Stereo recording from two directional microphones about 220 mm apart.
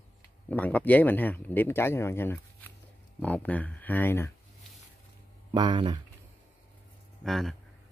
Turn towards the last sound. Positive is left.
turn(degrees=0)  # may be behind; listen again after turning